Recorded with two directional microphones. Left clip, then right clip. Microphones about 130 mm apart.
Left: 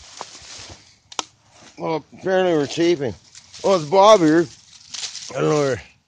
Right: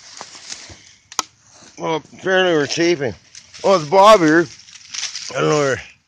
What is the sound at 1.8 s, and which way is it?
Speech, 5° left (ahead or behind).